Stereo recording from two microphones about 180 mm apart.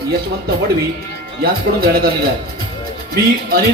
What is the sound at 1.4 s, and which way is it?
Speech, 55° right (ahead or behind).